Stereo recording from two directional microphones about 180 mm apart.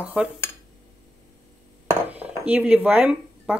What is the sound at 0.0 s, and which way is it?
Speech, 5° right (ahead or behind).